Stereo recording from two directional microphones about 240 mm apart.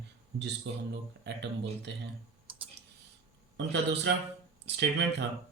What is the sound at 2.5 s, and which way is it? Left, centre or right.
Clicking, right.